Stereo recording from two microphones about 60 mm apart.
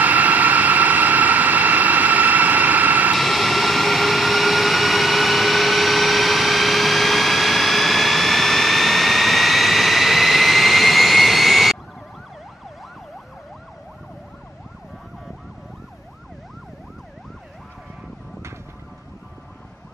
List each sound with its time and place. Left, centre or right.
0.0 s vehicle: right
3.2 s vehicle: centre